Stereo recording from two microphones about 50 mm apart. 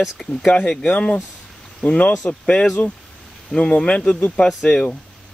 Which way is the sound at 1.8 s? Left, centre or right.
Left.